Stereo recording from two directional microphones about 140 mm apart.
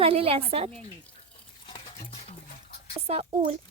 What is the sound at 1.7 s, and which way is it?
Stir, 35° left (ahead or behind).